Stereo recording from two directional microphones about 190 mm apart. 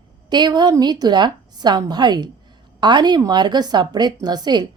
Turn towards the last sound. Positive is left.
turn(degrees=-20)  # may be behind; listen again after turning